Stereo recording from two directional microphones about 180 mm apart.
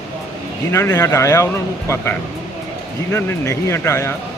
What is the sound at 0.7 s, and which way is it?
Speech, 15° left (ahead or behind).